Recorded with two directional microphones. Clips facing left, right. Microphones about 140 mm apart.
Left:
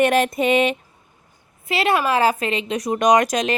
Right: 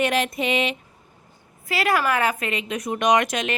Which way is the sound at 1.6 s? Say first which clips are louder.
Left 2 dB; 25° left (ahead or behind).